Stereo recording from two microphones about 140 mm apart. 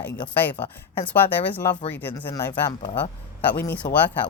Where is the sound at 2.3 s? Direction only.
30° left (ahead or behind).